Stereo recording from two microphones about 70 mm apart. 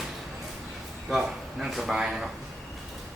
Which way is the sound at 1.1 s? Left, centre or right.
Centre.